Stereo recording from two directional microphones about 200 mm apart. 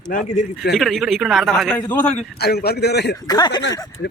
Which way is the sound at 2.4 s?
50° left (ahead or behind).